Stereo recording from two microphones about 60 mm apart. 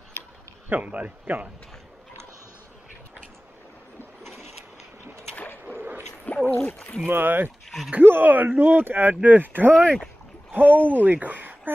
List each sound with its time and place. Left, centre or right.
0.7 s a man's voice: right
5.7 s a sound: right
6.2 s speech: left
7.1 s speech: right
9.8 s speech: centre
10.5 s speech: right